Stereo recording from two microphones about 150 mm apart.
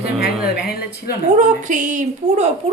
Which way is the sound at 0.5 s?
90° left.